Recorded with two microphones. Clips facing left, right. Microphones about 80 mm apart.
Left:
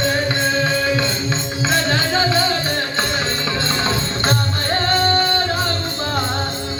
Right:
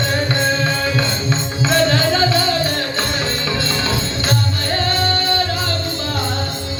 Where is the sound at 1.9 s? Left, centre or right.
Centre.